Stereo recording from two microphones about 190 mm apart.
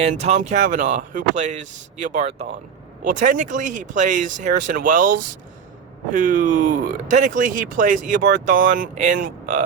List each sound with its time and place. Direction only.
0.0 s speech: 35° right (ahead or behind)